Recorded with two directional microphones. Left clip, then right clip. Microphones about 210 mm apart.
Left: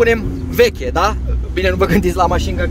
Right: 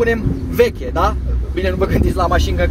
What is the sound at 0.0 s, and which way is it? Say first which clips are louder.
Speech: left 3 dB; 50° left (ahead or behind).